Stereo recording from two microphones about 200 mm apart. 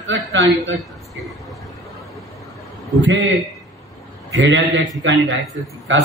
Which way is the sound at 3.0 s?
65° right (ahead or behind).